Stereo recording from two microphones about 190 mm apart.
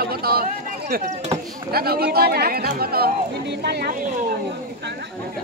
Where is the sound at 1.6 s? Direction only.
55° right (ahead or behind).